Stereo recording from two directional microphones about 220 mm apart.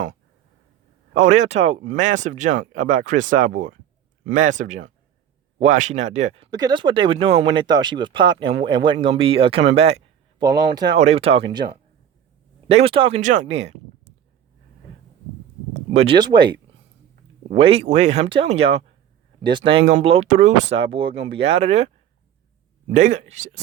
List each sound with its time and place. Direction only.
1.1 s speech: 35° right (ahead or behind)
12.7 s speech: 25° right (ahead or behind)
15.7 s a sound: 30° right (ahead or behind)
16.1 s speech: 20° right (ahead or behind)
17.6 s speech: 25° right (ahead or behind)
22.9 s speech: 35° right (ahead or behind)